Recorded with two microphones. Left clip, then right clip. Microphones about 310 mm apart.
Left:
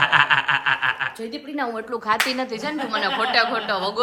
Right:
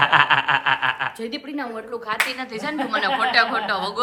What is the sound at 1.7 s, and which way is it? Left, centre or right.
Speech, left.